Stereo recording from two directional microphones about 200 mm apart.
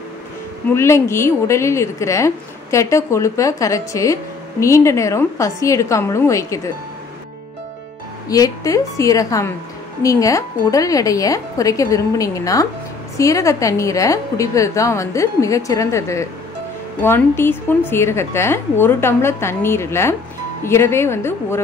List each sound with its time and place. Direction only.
0.7 s a woman's voice: 15° left (ahead or behind)
8.3 s a woman's voice: 15° left (ahead or behind)